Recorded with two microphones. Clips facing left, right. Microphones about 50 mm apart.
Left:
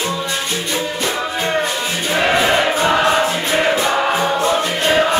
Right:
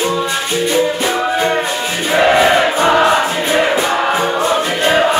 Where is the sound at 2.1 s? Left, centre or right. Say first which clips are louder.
Right 5 dB; centre.